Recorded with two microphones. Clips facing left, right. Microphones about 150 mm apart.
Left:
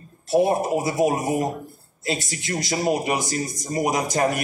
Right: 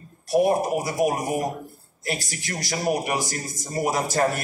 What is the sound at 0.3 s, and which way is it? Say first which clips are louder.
A man's voice: left 1 dB; 25° left (ahead or behind).